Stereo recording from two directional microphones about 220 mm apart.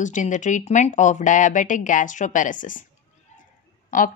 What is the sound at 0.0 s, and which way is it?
A woman's voice, 35° left (ahead or behind).